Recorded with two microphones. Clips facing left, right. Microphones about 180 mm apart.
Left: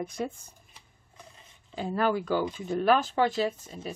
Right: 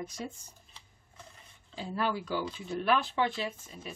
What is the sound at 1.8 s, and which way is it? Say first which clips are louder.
Speech: left 6 dB; 55° left (ahead or behind).